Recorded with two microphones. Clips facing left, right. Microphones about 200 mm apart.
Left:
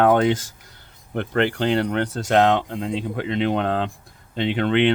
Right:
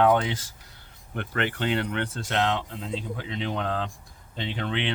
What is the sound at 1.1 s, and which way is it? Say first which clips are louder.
Speech: left 8 dB; 35° left (ahead or behind).